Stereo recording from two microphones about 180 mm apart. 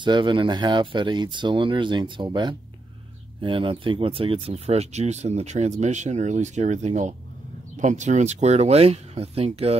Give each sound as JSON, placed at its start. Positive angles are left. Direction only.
{"t": 0.0, "sound": "speech", "side_deg": -25}